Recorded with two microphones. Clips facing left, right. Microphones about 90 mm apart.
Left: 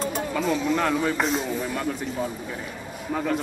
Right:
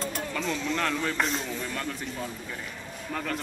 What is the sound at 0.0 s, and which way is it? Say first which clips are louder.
Speech: left 6 dB; 10° left (ahead or behind).